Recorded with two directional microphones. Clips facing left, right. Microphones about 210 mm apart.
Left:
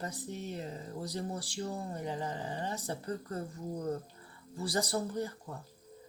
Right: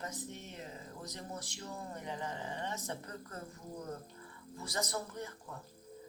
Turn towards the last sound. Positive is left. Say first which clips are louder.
# left 6 dB
turn(degrees=35)  # may be behind; listen again after turning